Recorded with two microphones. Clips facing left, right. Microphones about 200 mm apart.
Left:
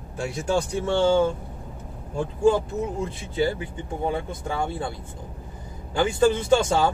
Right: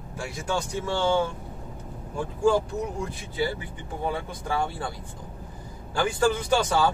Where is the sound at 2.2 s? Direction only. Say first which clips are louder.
Left 2 dB; 25° left (ahead or behind).